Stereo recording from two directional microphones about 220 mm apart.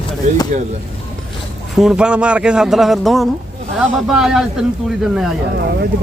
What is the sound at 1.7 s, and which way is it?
Speech, centre (ahead or behind).